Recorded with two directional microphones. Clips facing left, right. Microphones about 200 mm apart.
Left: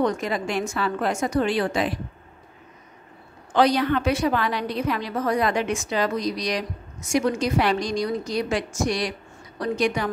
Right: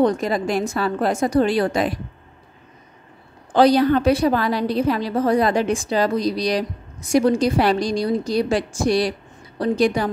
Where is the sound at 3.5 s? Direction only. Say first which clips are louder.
Right 5 dB; 35° right (ahead or behind).